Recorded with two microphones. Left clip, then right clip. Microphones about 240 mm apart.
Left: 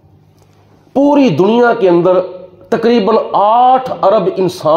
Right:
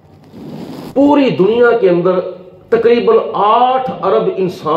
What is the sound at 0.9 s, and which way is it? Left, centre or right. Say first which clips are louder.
Speech: left 1 dB; left.